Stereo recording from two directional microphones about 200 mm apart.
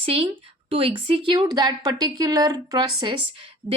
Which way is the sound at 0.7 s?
30° right (ahead or behind).